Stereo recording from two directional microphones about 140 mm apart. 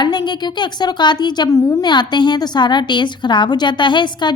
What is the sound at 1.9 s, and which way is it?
A woman's voice, 30° left (ahead or behind).